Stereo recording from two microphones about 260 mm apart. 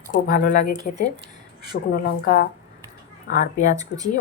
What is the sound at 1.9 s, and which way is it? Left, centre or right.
A woman's voice, left.